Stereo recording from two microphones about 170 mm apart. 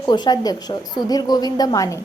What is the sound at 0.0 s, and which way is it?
A woman's voice, 25° left (ahead or behind).